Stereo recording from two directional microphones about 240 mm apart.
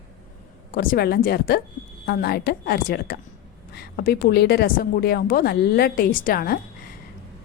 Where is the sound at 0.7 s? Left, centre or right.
Left.